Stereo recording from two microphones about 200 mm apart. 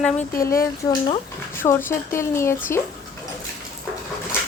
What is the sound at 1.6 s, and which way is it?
Speech, 10° left (ahead or behind).